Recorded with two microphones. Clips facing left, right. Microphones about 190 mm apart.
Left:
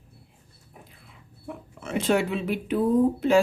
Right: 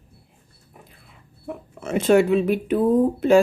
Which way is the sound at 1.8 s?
45° right (ahead or behind).